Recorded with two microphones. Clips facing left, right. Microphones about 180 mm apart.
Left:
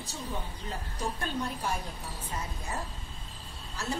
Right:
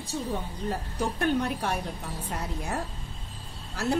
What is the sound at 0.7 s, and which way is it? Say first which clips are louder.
A woman's voice: right 6 dB; 70° right (ahead or behind).